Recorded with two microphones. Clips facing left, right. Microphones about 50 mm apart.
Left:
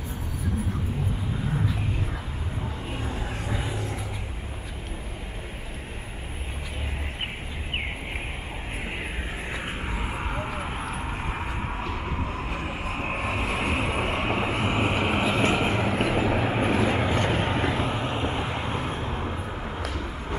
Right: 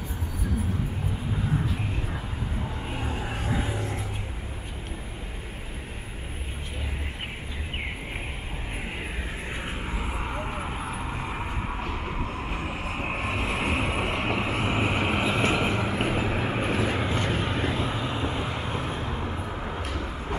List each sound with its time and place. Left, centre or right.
2.9 s vehicle: centre
9.7 s vehicle: centre
12.8 s vehicle: centre
13.1 s vehicle: centre
13.9 s vehicle: centre
15.7 s vehicle: centre
16.3 s vehicle: left
18.3 s vehicle: left
19.2 s vehicle: centre